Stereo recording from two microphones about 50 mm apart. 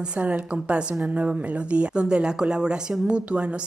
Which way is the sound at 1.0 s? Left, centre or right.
Right.